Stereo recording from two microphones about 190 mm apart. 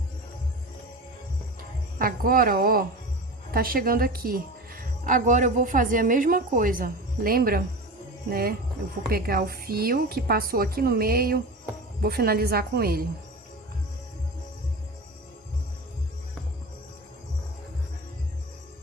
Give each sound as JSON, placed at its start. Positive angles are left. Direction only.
{"t": 2.0, "sound": "a woman's voice", "side_deg": -50}